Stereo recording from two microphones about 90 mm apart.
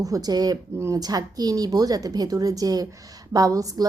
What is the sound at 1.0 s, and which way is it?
A woman's voice, 45° right (ahead or behind).